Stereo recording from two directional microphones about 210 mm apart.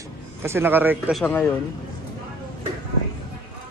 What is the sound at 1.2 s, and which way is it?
Speech, 10° left (ahead or behind).